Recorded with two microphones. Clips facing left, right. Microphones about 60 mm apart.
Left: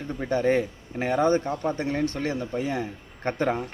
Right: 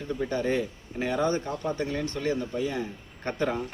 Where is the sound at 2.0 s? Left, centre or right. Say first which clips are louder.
Left 1 dB; left.